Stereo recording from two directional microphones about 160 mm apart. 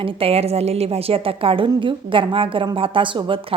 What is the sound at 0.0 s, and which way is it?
A woman's voice, 35° right (ahead or behind).